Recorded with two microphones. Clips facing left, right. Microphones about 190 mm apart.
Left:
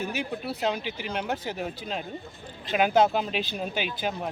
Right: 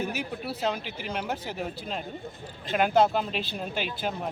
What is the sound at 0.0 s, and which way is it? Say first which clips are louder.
Speech: left 1 dB; 5° right (ahead or behind).